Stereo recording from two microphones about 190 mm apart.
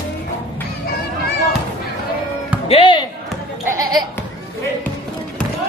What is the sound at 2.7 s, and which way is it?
Basketball bounce, 30° left (ahead or behind).